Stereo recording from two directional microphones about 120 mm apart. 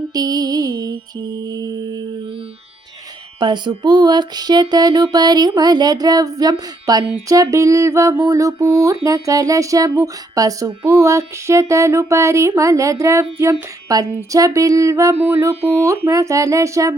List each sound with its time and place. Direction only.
0.1 s mantra: 30° right (ahead or behind)
3.4 s mantra: 40° right (ahead or behind)
7.3 s a sound: 25° right (ahead or behind)